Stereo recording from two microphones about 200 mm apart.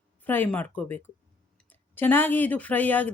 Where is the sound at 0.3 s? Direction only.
10° left (ahead or behind).